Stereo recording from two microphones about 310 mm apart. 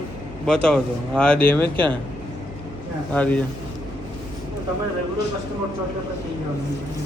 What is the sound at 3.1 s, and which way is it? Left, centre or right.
Speech, centre.